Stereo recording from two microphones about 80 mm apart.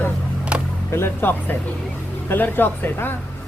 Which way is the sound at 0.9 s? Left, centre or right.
Left.